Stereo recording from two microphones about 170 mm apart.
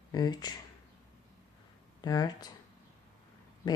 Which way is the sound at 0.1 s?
25° left (ahead or behind).